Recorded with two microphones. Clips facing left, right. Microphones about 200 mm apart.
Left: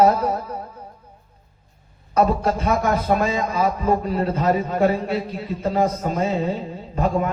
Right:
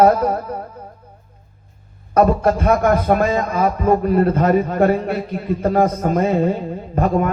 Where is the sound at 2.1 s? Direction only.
55° right (ahead or behind).